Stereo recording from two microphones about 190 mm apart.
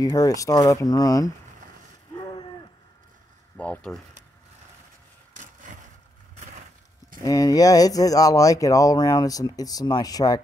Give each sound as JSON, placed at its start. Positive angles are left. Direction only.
{"t": 0.0, "sound": "speech", "side_deg": 20}
{"t": 3.5, "sound": "speech", "side_deg": 5}
{"t": 5.3, "sound": "vehicle", "side_deg": -40}
{"t": 7.2, "sound": "speech", "side_deg": 20}